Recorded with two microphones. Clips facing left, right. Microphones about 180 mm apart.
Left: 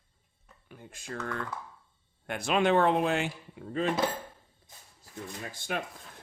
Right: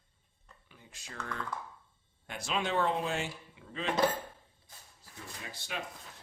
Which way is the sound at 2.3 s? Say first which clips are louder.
Left 8 dB; 60° left (ahead or behind).